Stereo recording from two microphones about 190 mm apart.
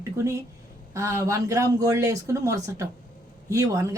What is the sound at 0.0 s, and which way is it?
Speech, 15° right (ahead or behind).